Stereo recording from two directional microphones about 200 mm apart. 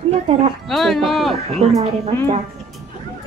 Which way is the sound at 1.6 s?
30° right (ahead or behind).